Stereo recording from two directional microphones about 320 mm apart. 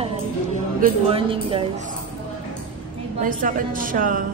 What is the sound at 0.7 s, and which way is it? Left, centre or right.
Speech, right.